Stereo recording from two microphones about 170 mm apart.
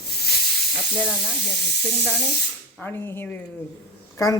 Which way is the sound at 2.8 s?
15° left (ahead or behind).